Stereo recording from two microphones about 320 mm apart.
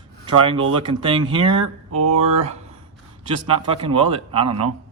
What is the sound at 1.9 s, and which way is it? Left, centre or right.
Speech, right.